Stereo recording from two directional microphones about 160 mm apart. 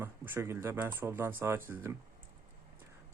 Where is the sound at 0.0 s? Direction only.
15° right (ahead or behind).